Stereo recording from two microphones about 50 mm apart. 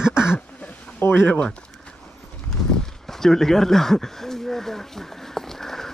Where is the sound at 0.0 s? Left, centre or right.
Centre.